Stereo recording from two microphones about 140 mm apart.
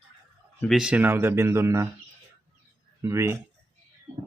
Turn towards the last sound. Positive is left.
turn(degrees=-20)  # may be behind; listen again after turning